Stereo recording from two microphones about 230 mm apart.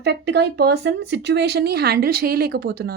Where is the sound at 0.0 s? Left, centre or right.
Right.